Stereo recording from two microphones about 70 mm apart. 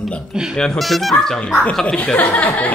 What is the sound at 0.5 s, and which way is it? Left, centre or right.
Speech, centre.